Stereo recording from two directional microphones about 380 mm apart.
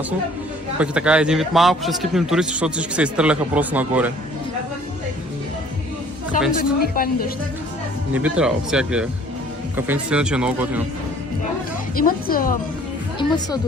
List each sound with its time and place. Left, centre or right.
0.8 s a man's voice: centre
6.6 s speech: left
8.1 s a man's voice: centre
11.9 s speech: left
13.1 s a woman's voice: centre